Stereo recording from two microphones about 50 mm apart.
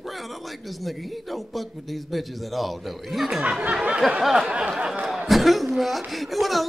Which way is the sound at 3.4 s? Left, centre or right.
Right.